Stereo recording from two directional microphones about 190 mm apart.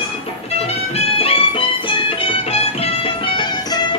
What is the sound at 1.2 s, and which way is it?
Music, 25° left (ahead or behind).